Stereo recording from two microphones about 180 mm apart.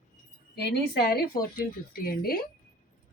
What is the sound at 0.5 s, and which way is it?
A woman's voice, 60° left (ahead or behind).